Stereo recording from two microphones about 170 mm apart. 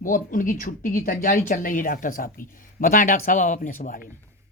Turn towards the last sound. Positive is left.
turn(degrees=55)  # may be behind; listen again after turning